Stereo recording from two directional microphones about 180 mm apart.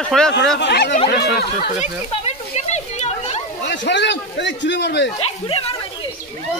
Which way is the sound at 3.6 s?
80° left.